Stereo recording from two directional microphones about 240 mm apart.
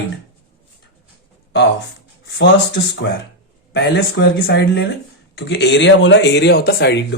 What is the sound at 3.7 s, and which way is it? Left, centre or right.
Speech, left.